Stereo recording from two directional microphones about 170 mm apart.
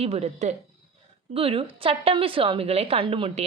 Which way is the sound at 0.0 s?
35° right (ahead or behind).